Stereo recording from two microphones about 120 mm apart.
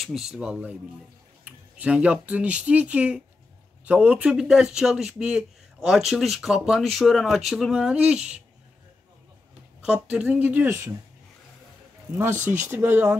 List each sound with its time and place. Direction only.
0.0 s speech: 5° right (ahead or behind)
9.8 s speech: 10° right (ahead or behind)
12.4 s speech: 15° right (ahead or behind)